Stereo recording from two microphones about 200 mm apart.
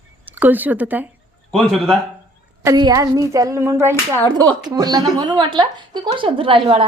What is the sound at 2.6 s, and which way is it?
Speech, 20° right (ahead or behind).